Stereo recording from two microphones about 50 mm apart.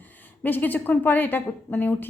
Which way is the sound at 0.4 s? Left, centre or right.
Left.